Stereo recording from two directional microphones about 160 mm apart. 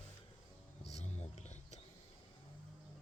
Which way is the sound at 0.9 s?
45° left (ahead or behind).